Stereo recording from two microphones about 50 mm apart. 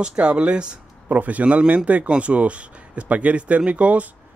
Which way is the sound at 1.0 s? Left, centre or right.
Right.